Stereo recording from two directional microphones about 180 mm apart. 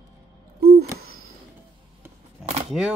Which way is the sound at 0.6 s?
60° right (ahead or behind).